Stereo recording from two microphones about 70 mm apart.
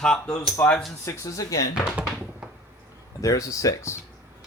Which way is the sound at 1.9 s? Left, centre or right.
Centre.